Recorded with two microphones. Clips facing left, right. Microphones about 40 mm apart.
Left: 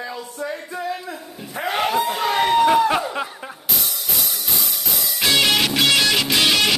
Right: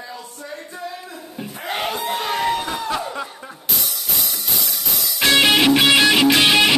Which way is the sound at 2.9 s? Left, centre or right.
Left.